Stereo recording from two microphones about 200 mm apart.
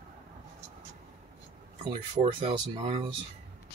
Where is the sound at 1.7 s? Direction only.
30° right (ahead or behind).